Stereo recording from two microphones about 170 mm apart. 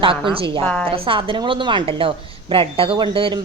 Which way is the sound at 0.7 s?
5° left (ahead or behind).